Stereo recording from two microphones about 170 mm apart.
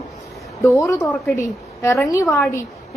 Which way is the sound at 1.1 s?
10° left (ahead or behind).